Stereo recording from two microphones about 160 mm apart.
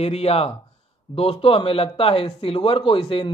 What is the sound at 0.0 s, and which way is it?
Speech, 40° left (ahead or behind).